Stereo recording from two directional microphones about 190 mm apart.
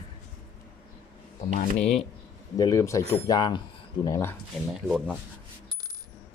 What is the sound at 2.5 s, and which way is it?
Speech, 20° left (ahead or behind).